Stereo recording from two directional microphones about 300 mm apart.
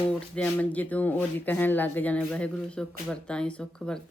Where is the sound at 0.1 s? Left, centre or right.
Centre.